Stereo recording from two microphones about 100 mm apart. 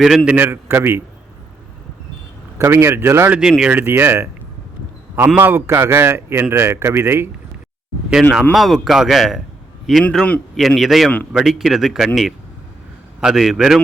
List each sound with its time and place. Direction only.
0.3 s a man's voice: 20° right (ahead or behind)
2.6 s a man's voice: 25° right (ahead or behind)
8.1 s speech: 5° right (ahead or behind)
10.0 s a man's voice: 10° left (ahead or behind)
10.6 s speech: centre (ahead or behind)